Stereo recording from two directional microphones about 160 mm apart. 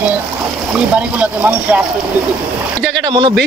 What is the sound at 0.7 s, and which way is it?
Speech, 10° right (ahead or behind).